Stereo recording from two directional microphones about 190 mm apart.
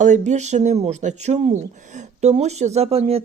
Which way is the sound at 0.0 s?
40° right (ahead or behind).